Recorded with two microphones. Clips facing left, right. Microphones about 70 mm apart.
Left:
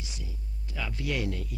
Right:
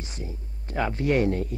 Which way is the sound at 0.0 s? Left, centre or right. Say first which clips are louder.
Right 6 dB; right.